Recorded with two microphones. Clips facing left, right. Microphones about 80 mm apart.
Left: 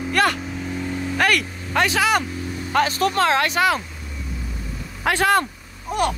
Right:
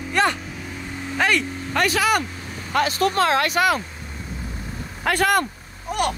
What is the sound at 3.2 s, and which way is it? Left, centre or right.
Speech, left.